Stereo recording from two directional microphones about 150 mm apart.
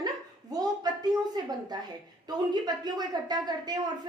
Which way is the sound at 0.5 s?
25° right (ahead or behind).